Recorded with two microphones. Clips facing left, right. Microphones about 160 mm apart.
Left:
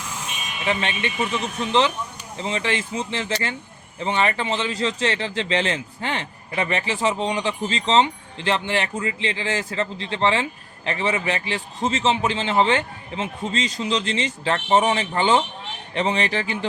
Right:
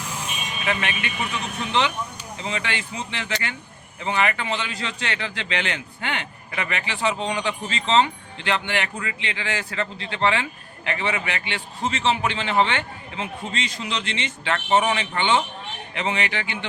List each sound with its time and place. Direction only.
0.6 s speech: 30° left (ahead or behind)
2.4 s a man's voice: 30° left (ahead or behind)